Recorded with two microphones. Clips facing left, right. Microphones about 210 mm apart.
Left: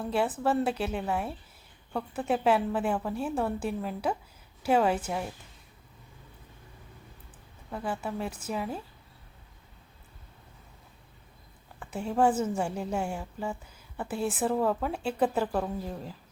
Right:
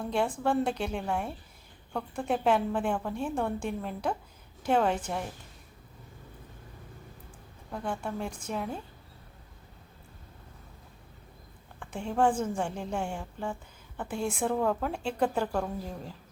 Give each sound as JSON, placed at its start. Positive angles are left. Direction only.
{"t": 0.0, "sound": "a woman's voice", "side_deg": 5}
{"t": 7.7, "sound": "a woman's voice", "side_deg": 5}
{"t": 11.8, "sound": "a woman's voice", "side_deg": 5}